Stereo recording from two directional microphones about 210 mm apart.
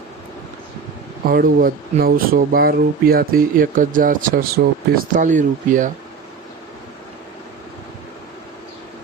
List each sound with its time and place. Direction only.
1.2 s speech: 45° right (ahead or behind)